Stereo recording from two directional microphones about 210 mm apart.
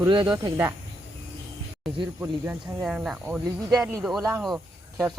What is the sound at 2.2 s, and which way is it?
Speech, 10° right (ahead or behind).